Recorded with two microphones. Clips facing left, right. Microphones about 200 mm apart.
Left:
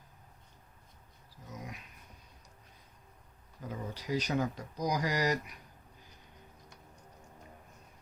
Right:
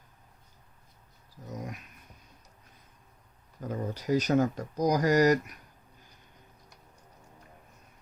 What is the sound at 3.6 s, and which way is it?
Speech, 45° right (ahead or behind).